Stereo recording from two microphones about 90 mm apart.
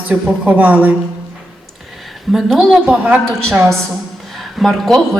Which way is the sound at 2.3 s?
Centre (ahead or behind).